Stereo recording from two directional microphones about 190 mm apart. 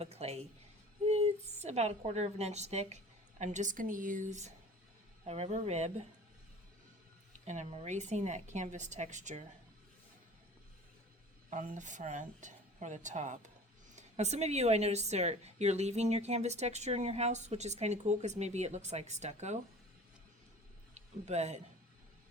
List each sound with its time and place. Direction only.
0.0 s a woman's voice: 35° right (ahead or behind)
7.4 s speech: 40° right (ahead or behind)
11.5 s speech: 40° right (ahead or behind)
20.9 s speech: 35° right (ahead or behind)